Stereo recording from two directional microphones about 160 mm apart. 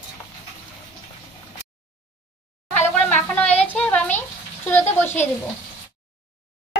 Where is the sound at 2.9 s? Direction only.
10° left (ahead or behind).